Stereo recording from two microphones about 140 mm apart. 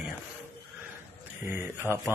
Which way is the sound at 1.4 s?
15° right (ahead or behind).